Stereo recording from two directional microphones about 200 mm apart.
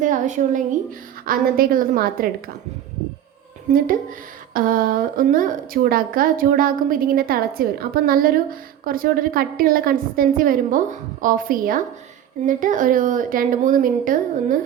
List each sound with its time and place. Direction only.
0.0 s a woman's voice: 40° right (ahead or behind)
3.7 s a woman's voice: 45° right (ahead or behind)